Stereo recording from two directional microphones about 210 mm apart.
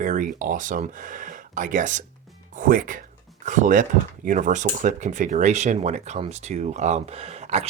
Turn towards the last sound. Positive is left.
turn(degrees=-30)  # may be behind; listen again after turning